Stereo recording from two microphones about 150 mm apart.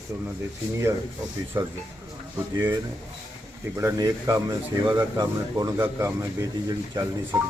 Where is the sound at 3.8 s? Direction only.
20° right (ahead or behind).